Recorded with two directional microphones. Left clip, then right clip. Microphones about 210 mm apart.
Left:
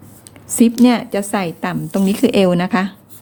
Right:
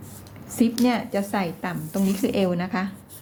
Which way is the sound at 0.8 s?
55° left (ahead or behind).